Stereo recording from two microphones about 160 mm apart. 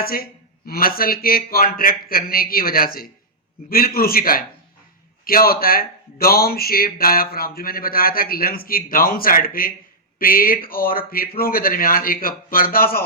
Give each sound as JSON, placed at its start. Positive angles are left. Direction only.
{"t": 0.0, "sound": "a man's voice", "side_deg": 70}